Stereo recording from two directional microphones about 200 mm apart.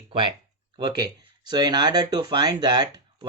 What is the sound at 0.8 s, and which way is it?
Speech, 20° right (ahead or behind).